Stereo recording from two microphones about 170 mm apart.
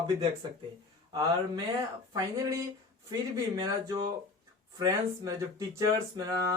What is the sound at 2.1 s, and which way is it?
Speech, 20° right (ahead or behind).